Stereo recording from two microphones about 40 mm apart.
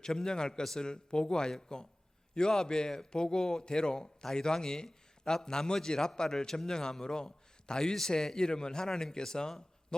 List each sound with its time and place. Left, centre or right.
0.0 s a man's voice: centre